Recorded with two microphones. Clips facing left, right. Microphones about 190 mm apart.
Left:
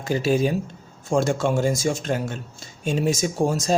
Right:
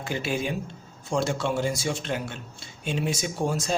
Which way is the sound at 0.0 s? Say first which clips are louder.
Left 8 dB; 40° left (ahead or behind).